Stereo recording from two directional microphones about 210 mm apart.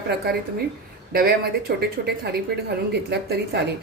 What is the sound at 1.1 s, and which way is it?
Speech, 45° right (ahead or behind).